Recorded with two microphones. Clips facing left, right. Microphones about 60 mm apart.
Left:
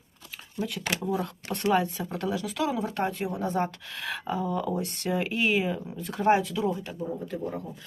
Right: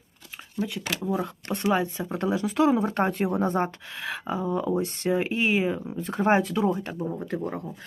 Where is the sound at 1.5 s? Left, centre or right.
Centre; by 3.7 s right.